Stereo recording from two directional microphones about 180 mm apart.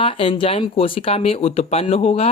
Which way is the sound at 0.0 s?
30° left (ahead or behind).